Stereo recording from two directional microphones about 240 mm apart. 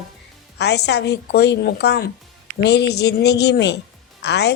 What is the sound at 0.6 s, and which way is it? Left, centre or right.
Speech, left.